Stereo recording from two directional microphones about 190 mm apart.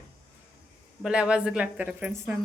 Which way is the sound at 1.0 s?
5° right (ahead or behind).